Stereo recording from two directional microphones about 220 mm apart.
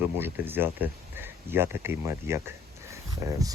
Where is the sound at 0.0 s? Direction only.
10° right (ahead or behind).